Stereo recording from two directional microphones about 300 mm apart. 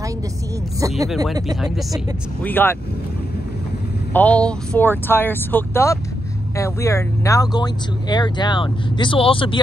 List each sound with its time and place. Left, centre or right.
0.7 s speech: centre
1.0 s speech: centre
2.4 s speech: centre
4.1 s speech: centre